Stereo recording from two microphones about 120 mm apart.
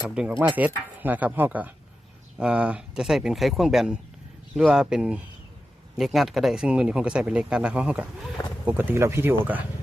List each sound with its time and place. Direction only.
0.1 s speech: 5° right (ahead or behind)